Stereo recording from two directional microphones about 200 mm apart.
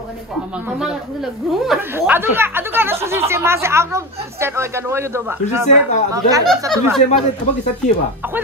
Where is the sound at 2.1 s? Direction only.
10° right (ahead or behind).